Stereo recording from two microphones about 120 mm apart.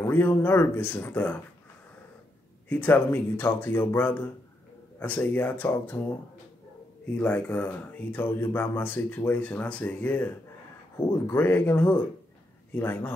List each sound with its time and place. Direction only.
0.0 s speech: 20° left (ahead or behind)
2.7 s speech: 15° left (ahead or behind)
7.2 s speech: 10° left (ahead or behind)